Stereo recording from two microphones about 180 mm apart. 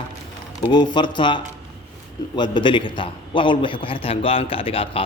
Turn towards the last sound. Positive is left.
turn(degrees=30)  # may be behind; listen again after turning